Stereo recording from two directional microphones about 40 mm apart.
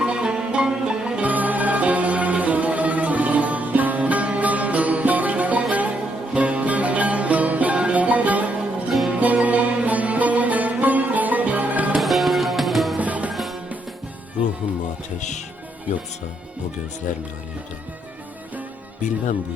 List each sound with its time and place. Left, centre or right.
0.0 s music: right
1.3 s music: right
11.9 s music: centre
13.0 s music: right
13.3 s music: centre